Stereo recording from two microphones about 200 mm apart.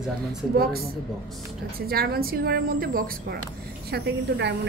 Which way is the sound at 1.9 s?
50° right (ahead or behind).